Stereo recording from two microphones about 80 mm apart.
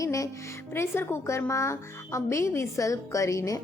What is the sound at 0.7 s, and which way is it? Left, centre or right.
A woman's voice, left.